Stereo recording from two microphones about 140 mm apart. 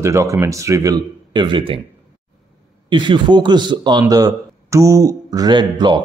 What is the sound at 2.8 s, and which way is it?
Speech, 35° right (ahead or behind).